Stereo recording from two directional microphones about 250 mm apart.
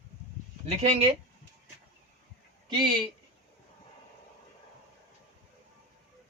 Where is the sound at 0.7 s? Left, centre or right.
Right.